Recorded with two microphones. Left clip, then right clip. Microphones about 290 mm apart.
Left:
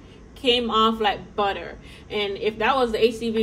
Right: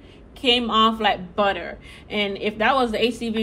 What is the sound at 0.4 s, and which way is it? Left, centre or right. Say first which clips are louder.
A man's voice: right 1 dB; right.